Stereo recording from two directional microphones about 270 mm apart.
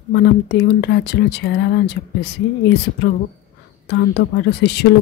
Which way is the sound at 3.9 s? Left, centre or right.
Left.